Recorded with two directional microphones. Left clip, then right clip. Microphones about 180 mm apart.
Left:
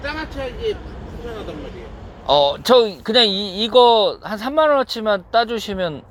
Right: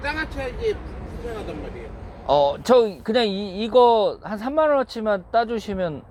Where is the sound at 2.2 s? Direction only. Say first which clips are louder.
Left 3 dB; 10° right (ahead or behind).